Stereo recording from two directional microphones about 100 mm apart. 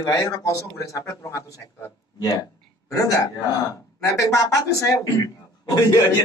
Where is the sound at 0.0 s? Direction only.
35° left (ahead or behind).